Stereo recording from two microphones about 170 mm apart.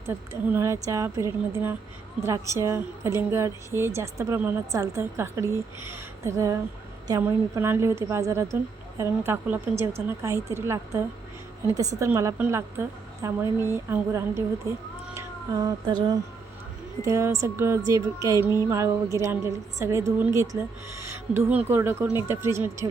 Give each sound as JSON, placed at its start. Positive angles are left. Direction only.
{"t": 0.1, "sound": "a woman's voice", "side_deg": -10}